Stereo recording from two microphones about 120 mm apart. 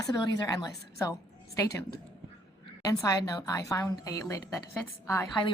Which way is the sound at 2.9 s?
30° left (ahead or behind).